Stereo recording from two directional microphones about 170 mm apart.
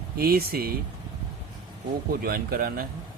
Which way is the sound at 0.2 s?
60° right (ahead or behind).